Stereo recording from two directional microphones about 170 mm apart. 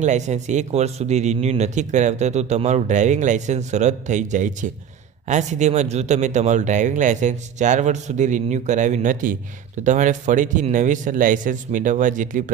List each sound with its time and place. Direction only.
0.0 s speech: 45° right (ahead or behind)